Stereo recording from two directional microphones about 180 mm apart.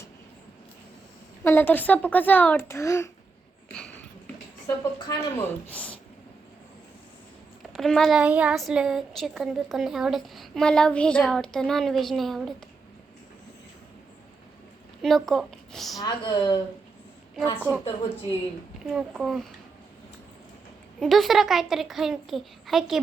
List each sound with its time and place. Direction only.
1.5 s speech: 10° left (ahead or behind)
4.6 s speech: 15° left (ahead or behind)
7.8 s speech: centre (ahead or behind)
15.0 s a woman's voice: centre (ahead or behind)
16.0 s a woman's voice: 25° left (ahead or behind)
17.7 s a woman's voice: 20° left (ahead or behind)
18.9 s speech: 5° right (ahead or behind)
21.0 s speech: centre (ahead or behind)